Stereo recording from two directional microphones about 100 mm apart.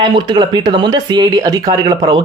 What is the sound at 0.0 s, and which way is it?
Speech, 50° right (ahead or behind).